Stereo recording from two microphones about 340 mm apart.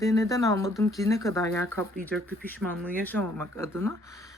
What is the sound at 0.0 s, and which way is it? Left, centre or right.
A woman's voice, centre.